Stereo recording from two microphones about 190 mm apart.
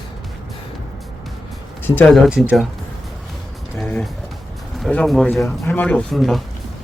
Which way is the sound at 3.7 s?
5° left (ahead or behind).